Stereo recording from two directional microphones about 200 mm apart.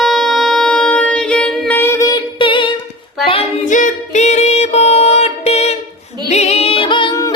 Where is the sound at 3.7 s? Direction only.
40° left (ahead or behind).